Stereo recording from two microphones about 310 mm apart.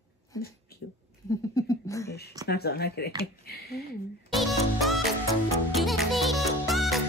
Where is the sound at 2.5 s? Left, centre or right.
Left.